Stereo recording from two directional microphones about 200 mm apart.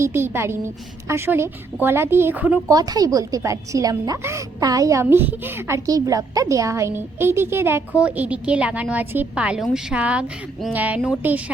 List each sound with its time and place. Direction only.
0.0 s a woman's voice: 10° right (ahead or behind)
2.7 s a woman's voice: 20° right (ahead or behind)